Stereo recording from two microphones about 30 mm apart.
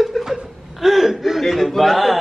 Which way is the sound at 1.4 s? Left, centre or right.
Centre.